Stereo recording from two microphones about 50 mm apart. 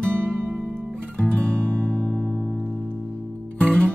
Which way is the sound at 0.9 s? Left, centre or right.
Centre.